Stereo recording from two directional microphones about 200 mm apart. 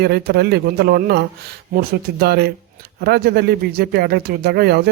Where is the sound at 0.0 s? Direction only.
55° right (ahead or behind).